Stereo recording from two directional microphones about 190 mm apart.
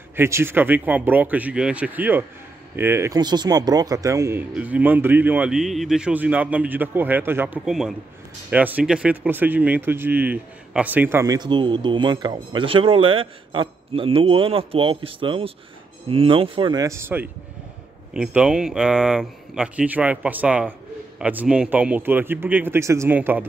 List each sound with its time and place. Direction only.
0.1 s speech: 10° right (ahead or behind)